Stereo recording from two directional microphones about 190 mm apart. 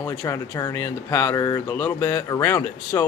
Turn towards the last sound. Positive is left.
turn(degrees=15)  # may be behind; listen again after turning